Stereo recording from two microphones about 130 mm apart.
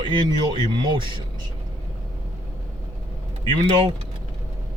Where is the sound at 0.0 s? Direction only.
35° right (ahead or behind).